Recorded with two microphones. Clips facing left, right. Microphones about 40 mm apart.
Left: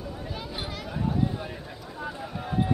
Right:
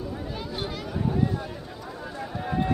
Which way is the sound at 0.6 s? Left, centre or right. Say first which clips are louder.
Right 2 dB; centre.